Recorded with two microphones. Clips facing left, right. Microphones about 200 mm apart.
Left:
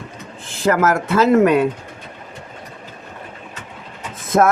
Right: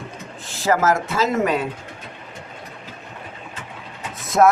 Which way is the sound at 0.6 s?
55° left (ahead or behind).